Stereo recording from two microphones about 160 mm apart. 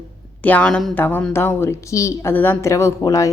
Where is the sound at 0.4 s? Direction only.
10° left (ahead or behind).